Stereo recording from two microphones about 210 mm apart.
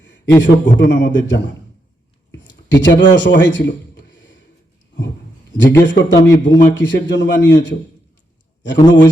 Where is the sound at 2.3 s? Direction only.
60° left (ahead or behind).